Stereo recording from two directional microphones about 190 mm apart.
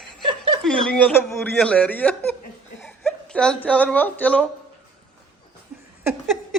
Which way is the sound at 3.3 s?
5° left (ahead or behind).